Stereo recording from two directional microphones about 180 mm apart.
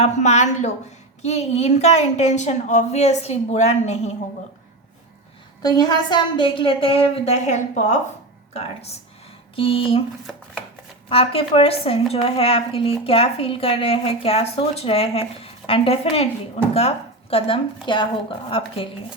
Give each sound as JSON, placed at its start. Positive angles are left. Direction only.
{"t": 0.0, "sound": "a woman's voice", "side_deg": 40}
{"t": 5.6, "sound": "a woman's voice", "side_deg": 25}
{"t": 9.6, "sound": "a woman's voice", "side_deg": 30}
{"t": 11.1, "sound": "a woman's voice", "side_deg": 30}